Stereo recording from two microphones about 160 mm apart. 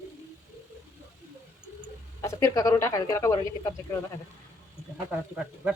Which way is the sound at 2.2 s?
15° left (ahead or behind).